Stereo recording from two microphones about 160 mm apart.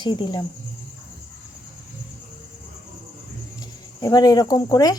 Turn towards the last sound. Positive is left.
turn(degrees=25)  # may be behind; listen again after turning